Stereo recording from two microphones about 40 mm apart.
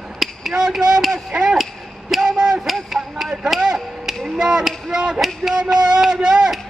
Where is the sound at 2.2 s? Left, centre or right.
Right.